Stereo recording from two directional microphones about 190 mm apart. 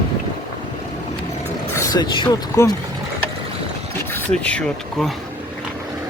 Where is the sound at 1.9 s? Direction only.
25° left (ahead or behind).